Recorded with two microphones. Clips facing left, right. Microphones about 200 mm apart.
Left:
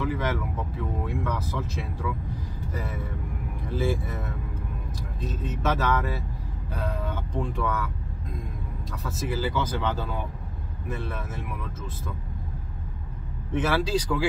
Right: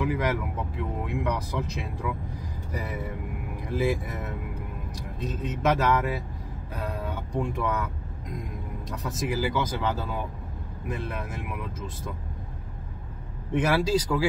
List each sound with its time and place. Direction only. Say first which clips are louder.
0.0 s speech: right 1 dB; 10° right (ahead or behind)
5.3 s speech: right 3 dB; 15° right (ahead or behind)
8.9 s speech: right 1 dB; 15° right (ahead or behind)
13.5 s speech: right 1 dB; 15° right (ahead or behind)